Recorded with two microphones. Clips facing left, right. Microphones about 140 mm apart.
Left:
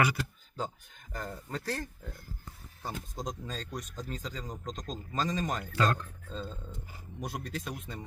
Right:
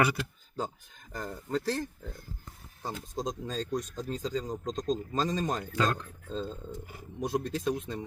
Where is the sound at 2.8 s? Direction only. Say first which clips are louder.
Right 3 dB; 30° right (ahead or behind).